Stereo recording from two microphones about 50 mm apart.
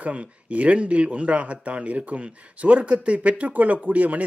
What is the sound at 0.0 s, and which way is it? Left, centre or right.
Speech, right.